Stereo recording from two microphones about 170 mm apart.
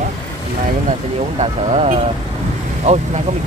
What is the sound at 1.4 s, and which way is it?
Speech, 40° right (ahead or behind).